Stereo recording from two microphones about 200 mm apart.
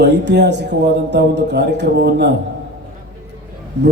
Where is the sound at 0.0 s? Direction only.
60° right (ahead or behind).